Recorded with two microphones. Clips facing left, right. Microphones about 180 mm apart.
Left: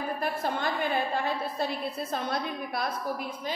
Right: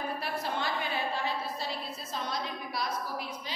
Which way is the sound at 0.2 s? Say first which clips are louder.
Left 4 dB; 50° left (ahead or behind).